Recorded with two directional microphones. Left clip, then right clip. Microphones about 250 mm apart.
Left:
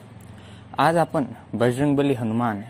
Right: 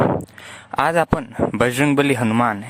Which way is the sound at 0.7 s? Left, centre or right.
Right.